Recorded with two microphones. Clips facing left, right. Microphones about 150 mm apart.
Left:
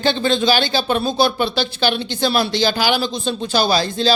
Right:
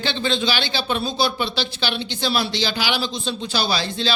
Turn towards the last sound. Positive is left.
turn(degrees=45)  # may be behind; listen again after turning